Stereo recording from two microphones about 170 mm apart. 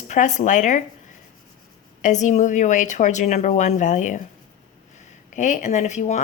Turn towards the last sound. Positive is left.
turn(degrees=45)  # may be behind; listen again after turning